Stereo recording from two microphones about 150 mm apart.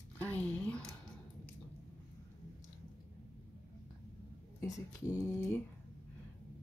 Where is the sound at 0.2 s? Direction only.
10° left (ahead or behind).